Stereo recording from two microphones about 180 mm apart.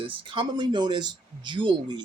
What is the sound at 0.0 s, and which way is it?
Speech, 30° right (ahead or behind).